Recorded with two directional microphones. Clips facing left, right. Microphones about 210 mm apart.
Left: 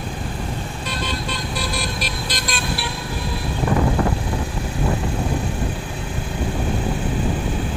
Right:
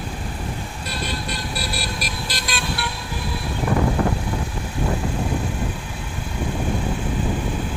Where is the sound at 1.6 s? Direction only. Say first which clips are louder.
Left 2 dB; 5° right (ahead or behind).